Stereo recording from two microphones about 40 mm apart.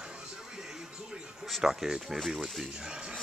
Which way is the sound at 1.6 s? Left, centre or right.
Centre.